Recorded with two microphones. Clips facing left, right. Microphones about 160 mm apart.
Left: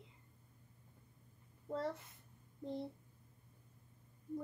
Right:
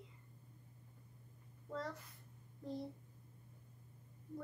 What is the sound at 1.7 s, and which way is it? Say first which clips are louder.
A child's voice: left 4 dB; 25° left (ahead or behind).